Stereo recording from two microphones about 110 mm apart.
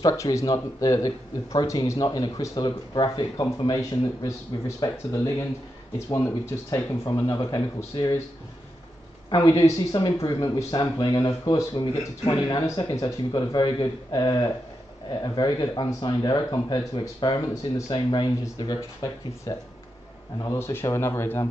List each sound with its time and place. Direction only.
0.0 s speech: 30° left (ahead or behind)
9.3 s speech: 35° left (ahead or behind)
19.5 s speech: 30° left (ahead or behind)